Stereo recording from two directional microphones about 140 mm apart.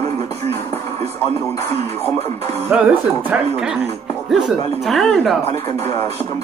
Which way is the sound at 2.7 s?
10° right (ahead or behind).